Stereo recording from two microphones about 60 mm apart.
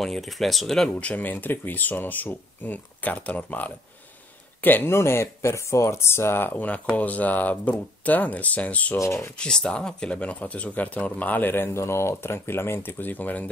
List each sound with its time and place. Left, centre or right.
0.0 s speech: centre
0.8 s speech: left
4.6 s speech: left
8.9 s speech: left
9.4 s speech: centre